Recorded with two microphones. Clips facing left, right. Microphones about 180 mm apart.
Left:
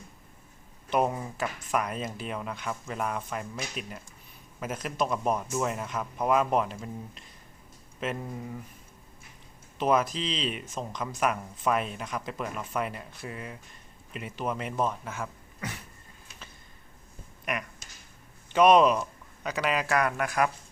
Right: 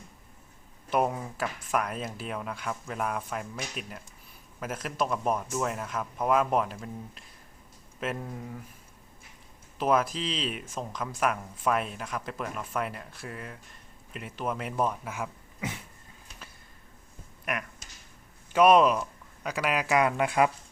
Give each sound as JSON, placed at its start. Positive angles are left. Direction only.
{"t": 0.9, "sound": "speech", "side_deg": 0}
{"t": 9.7, "sound": "speech", "side_deg": -5}
{"t": 17.4, "sound": "speech", "side_deg": -5}
{"t": 20.0, "sound": "speech", "side_deg": -20}